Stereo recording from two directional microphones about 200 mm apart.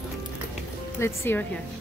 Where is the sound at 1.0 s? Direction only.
10° left (ahead or behind).